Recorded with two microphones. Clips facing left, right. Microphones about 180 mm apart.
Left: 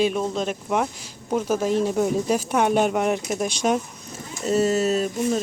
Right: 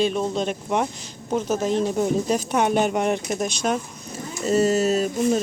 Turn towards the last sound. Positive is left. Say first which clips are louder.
# right 2 dB
turn(degrees=0)  # may be behind; listen again after turning